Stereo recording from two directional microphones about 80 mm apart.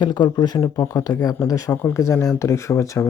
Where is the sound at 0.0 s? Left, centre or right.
Left.